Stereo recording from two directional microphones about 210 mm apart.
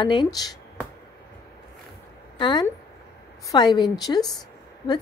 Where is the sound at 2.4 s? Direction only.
20° left (ahead or behind).